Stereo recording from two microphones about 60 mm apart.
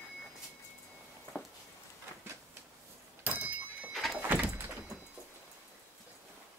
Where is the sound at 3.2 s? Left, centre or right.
Right.